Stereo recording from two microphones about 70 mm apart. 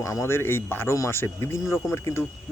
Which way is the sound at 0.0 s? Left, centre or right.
Left.